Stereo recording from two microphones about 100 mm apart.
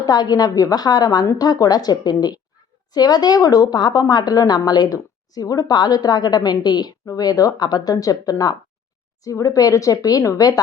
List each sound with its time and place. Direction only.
0.0 s a woman's voice: 40° left (ahead or behind)